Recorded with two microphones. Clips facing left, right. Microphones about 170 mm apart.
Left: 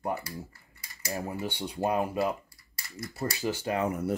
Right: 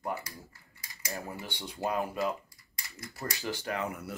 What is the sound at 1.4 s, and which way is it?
Speech, 35° left (ahead or behind).